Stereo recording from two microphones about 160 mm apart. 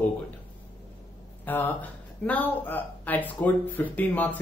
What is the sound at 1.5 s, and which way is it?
Speech, 10° left (ahead or behind).